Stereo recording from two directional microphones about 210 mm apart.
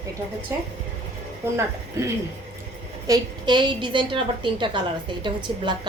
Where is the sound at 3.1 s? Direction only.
20° right (ahead or behind).